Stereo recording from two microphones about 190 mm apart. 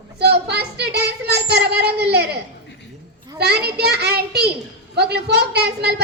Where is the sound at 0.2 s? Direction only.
60° right (ahead or behind).